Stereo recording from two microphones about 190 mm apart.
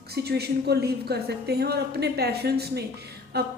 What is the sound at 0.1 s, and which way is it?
A woman's voice, 60° right (ahead or behind).